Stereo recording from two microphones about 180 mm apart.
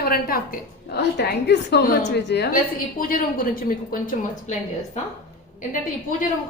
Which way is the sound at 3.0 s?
50° left (ahead or behind).